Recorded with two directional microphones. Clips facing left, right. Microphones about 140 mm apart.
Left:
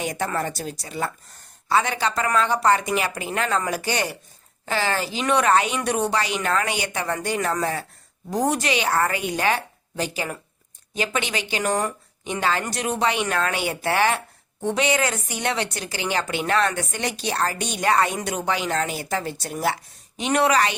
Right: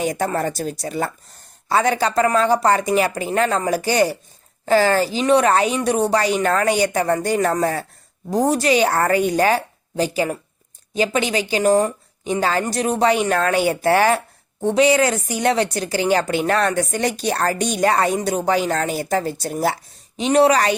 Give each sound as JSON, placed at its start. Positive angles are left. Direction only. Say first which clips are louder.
{"t": 0.0, "sound": "speech", "louder": "right 5 dB", "side_deg": -40}